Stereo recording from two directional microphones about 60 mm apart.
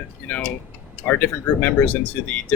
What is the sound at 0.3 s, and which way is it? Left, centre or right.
Speech, left.